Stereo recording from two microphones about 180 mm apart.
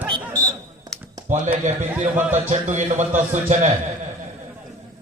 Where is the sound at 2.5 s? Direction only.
40° right (ahead or behind).